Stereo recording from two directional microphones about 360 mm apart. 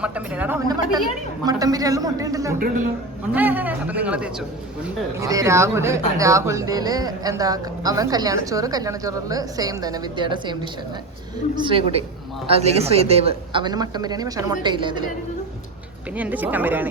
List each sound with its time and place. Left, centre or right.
0.0 s a man's voice: centre
2.6 s a man's voice: right
3.3 s a man's voice: centre
16.1 s a man's voice: centre